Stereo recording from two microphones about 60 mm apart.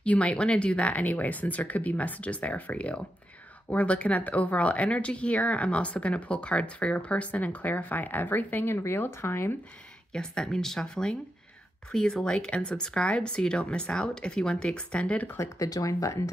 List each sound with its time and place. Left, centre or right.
0.0 s speech: left
10.1 s speech: centre
15.3 s speech: left
15.7 s speech: left